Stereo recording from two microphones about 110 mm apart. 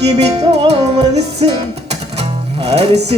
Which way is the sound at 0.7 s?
70° right (ahead or behind).